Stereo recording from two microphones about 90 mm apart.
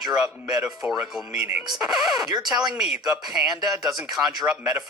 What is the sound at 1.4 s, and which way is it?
Speech, 25° right (ahead or behind).